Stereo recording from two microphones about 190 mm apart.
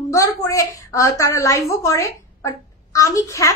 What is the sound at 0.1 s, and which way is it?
A woman's voice, 15° left (ahead or behind).